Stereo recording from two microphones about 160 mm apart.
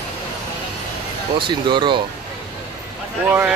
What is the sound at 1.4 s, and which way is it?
Speech, 30° right (ahead or behind).